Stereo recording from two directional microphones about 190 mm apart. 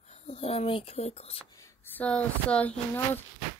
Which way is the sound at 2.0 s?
5° left (ahead or behind).